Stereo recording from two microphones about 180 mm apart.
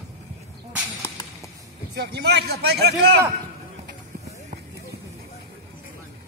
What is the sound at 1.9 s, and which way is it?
A man's voice, 65° right (ahead or behind).